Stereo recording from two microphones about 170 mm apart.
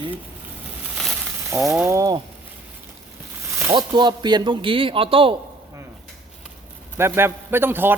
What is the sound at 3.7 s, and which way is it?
Speech, 25° right (ahead or behind).